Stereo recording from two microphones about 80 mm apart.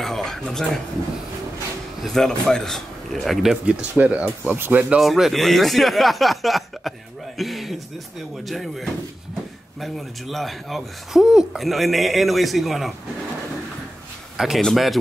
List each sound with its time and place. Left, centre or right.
0.0 s a sound: centre
2.1 s speech: centre
3.6 s speech: centre
5.0 s speech: centre
14.3 s a sound: centre
14.6 s speech: centre